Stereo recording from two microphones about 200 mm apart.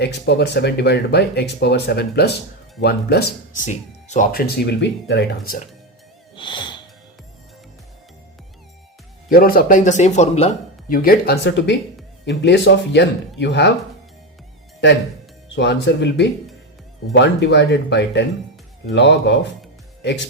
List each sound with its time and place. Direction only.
0.0 s speech: 55° left (ahead or behind)
3.6 s speech: 40° left (ahead or behind); by 5.5 s 60° left (ahead or behind)
6.3 s music: 25° left (ahead or behind)
9.3 s speech: 50° left (ahead or behind)
15.5 s speech: 60° left (ahead or behind)